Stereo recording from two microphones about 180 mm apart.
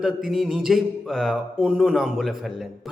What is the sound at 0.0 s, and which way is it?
Speech, centre (ahead or behind).